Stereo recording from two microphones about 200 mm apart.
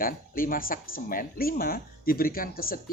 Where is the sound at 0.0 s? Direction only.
45° left (ahead or behind).